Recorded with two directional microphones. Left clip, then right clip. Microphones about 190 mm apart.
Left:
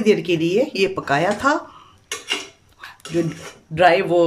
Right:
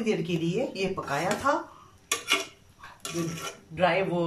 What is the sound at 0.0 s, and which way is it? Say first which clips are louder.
Speech: left 11 dB; 55° left (ahead or behind).